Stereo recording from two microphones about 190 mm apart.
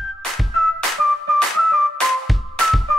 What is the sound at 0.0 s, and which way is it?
Music, centre (ahead or behind).